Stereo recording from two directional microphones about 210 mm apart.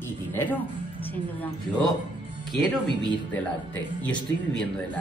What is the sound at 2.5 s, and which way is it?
Speech, 20° right (ahead or behind).